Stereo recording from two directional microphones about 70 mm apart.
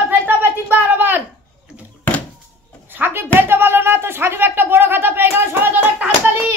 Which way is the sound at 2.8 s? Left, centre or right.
Right.